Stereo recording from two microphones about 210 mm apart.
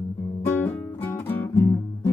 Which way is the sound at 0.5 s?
10° left (ahead or behind).